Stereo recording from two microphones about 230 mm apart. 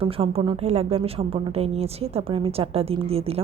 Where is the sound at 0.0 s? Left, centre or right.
Right.